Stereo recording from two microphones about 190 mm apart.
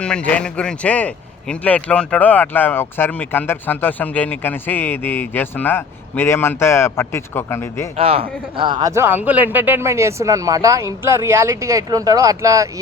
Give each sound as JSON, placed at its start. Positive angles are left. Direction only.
{"t": 0.0, "sound": "speech", "side_deg": 5}
{"t": 7.9, "sound": "a man's voice", "side_deg": -30}